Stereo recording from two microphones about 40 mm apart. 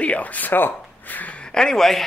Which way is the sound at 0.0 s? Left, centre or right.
Left.